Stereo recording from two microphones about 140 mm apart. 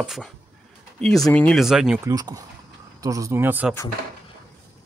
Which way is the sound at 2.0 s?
25° right (ahead or behind).